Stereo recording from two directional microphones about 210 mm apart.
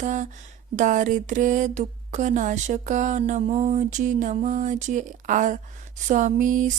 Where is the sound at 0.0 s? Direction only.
35° right (ahead or behind).